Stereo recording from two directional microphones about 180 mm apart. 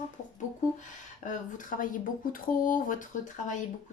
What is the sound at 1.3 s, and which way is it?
A woman's voice, 45° left (ahead or behind).